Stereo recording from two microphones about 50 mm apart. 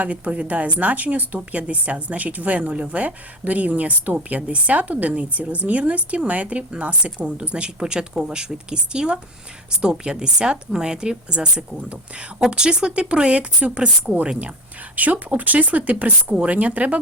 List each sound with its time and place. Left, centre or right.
0.0 s a woman's voice: right
12.4 s a woman's voice: centre
14.9 s a woman's voice: right